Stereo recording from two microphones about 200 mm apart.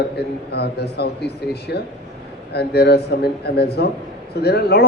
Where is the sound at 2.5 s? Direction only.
55° left (ahead or behind).